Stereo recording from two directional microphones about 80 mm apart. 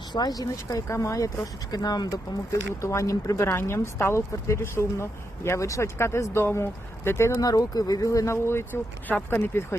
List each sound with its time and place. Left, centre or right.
0.1 s speech: left
2.8 s speech: left
7.4 s speech: left